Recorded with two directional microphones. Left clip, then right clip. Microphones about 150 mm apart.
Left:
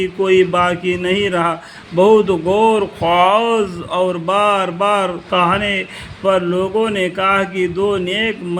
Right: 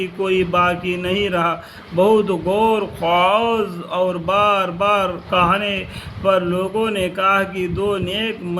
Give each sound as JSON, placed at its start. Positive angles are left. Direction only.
{"t": 0.0, "sound": "speech", "side_deg": 30}